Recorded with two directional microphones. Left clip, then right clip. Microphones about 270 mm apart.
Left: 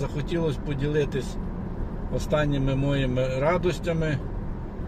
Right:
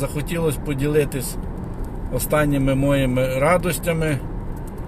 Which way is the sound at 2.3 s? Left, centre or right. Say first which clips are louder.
Right 6 dB; centre.